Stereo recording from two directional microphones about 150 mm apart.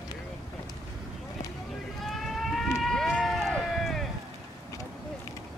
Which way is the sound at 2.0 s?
Centre (ahead or behind).